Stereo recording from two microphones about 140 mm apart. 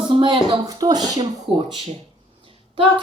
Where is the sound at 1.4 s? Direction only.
50° right (ahead or behind).